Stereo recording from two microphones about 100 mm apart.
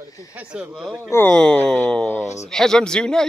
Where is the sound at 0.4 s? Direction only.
10° right (ahead or behind).